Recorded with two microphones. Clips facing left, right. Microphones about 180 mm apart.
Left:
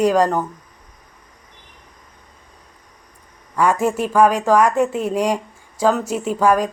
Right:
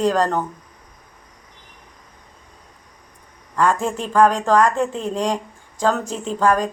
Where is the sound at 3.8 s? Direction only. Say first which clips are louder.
Left 2 dB; 10° left (ahead or behind).